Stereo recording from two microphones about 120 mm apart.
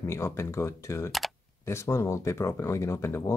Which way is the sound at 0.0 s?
20° left (ahead or behind).